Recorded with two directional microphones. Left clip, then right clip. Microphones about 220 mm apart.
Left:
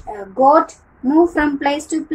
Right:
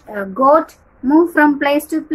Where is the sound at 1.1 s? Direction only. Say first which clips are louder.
Right 3 dB; 30° right (ahead or behind).